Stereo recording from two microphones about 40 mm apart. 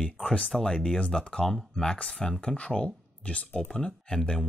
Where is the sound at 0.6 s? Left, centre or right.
Centre.